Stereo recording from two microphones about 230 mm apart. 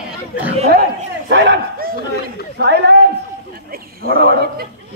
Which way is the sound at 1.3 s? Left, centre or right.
Right.